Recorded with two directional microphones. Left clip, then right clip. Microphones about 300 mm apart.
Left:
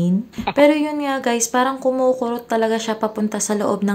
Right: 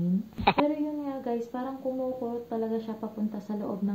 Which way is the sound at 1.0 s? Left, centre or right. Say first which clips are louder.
Left 12 dB; left.